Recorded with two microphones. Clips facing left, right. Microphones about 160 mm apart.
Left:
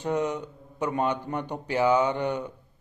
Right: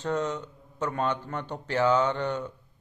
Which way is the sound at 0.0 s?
10° left (ahead or behind).